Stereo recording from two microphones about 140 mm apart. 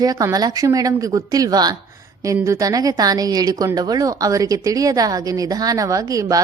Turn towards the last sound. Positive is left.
turn(degrees=-25)  # may be behind; listen again after turning